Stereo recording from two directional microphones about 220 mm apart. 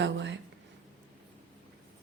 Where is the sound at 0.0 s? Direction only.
55° right (ahead or behind).